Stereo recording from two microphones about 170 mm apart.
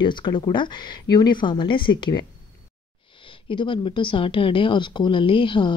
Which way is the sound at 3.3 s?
30° left (ahead or behind).